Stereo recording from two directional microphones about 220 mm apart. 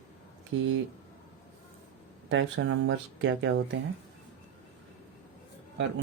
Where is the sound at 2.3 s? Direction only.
60° right (ahead or behind).